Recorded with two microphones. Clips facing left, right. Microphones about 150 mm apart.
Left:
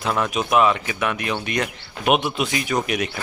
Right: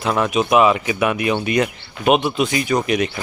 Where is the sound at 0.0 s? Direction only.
Centre (ahead or behind).